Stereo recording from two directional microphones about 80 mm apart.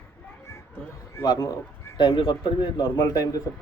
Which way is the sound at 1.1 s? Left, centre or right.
Left.